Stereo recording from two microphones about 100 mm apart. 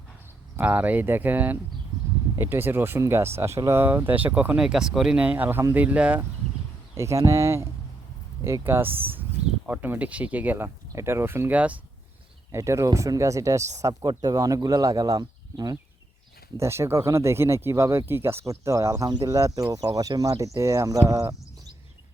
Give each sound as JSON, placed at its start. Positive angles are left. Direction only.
{"t": 0.5, "sound": "speech", "side_deg": -15}
{"t": 6.9, "sound": "speech", "side_deg": -30}
{"t": 12.5, "sound": "speech", "side_deg": -30}
{"t": 16.6, "sound": "speech", "side_deg": -30}